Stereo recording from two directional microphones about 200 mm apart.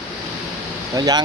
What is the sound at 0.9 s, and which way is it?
Speech, 20° right (ahead or behind).